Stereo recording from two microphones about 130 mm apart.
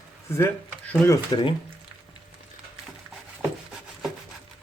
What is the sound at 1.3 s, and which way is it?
Speech, 40° left (ahead or behind).